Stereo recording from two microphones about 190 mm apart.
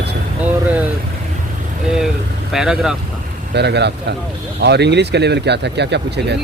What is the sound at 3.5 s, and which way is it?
Speech, 60° right (ahead or behind).